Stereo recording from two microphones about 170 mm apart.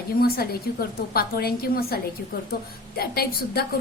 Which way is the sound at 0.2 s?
65° left (ahead or behind).